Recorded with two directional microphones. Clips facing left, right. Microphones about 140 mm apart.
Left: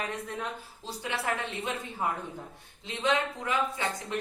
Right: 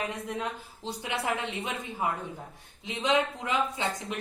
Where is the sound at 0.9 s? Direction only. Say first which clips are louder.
Right 1 dB; 20° right (ahead or behind).